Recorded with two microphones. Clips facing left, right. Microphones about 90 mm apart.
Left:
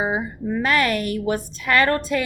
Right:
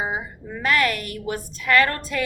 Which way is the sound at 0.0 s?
30° left (ahead or behind).